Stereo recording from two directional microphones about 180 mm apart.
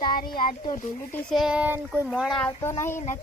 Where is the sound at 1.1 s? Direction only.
Centre (ahead or behind).